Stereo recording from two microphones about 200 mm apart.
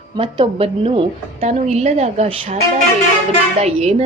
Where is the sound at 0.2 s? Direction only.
25° right (ahead or behind).